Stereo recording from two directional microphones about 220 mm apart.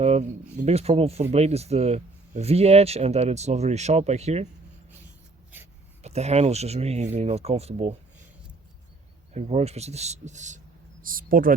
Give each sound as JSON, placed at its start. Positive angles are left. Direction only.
{"t": 0.0, "sound": "speech", "side_deg": -30}
{"t": 6.0, "sound": "speech", "side_deg": -30}
{"t": 9.3, "sound": "speech", "side_deg": -30}